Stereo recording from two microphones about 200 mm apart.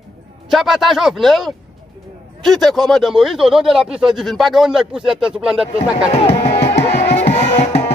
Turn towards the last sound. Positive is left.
turn(degrees=35)  # may be behind; listen again after turning